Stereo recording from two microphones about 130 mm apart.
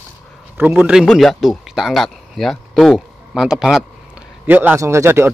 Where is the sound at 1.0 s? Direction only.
5° left (ahead or behind).